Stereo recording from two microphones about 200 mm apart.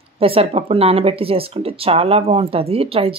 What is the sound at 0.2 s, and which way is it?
Speech, 30° right (ahead or behind).